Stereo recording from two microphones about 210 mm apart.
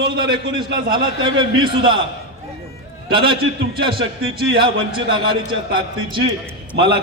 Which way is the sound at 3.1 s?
25° right (ahead or behind).